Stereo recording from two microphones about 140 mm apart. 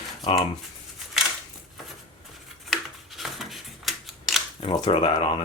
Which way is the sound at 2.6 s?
Centre (ahead or behind).